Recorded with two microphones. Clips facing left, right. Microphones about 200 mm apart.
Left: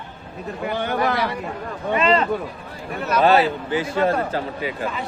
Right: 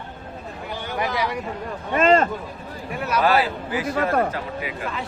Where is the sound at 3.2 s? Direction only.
25° left (ahead or behind).